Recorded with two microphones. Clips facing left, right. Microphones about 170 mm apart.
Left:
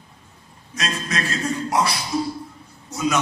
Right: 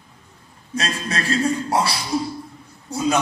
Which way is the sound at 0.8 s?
30° right (ahead or behind).